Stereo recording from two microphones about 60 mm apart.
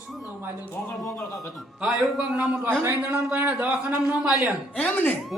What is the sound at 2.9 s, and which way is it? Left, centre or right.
A man's voice, right.